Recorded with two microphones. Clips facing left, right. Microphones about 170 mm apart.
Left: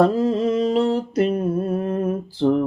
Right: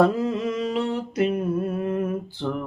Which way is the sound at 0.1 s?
35° left (ahead or behind).